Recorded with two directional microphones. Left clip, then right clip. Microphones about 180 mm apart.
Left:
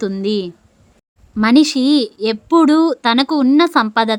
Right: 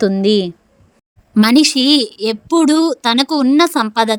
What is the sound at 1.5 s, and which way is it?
Speech, centre (ahead or behind).